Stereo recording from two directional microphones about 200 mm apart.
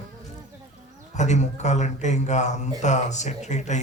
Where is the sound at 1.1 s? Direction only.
35° left (ahead or behind).